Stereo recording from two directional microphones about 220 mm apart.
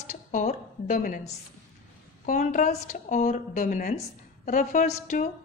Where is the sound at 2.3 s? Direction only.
35° left (ahead or behind).